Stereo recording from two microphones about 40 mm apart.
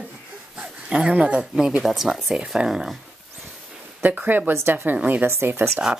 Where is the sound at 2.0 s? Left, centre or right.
Centre.